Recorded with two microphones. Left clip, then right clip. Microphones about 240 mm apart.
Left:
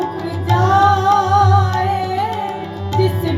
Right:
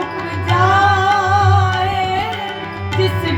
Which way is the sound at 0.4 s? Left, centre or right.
Right.